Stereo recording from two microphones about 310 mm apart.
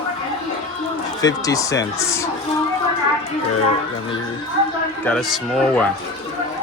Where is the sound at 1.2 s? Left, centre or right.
Centre.